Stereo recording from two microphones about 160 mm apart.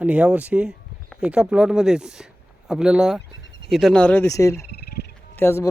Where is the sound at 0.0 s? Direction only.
10° right (ahead or behind); by 4.3 s 10° left (ahead or behind).